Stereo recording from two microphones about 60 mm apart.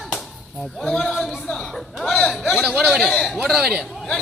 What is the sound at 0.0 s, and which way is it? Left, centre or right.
Chop, centre.